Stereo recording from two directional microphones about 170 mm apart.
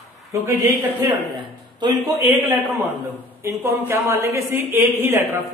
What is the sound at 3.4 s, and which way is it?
A woman's voice, 15° right (ahead or behind).